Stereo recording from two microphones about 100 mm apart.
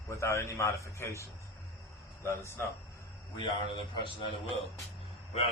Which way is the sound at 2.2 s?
25° left (ahead or behind).